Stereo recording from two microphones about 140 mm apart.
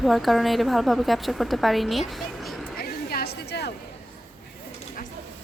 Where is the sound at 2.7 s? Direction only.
90° left.